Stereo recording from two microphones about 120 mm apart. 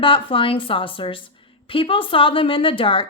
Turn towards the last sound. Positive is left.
turn(degrees=45)  # may be behind; listen again after turning